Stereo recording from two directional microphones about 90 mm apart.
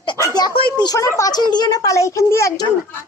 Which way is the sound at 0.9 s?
35° left (ahead or behind).